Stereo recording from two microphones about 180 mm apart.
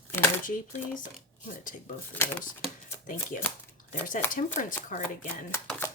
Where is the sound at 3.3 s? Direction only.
50° left (ahead or behind).